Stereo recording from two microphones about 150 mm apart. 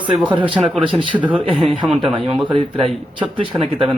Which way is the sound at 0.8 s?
35° right (ahead or behind).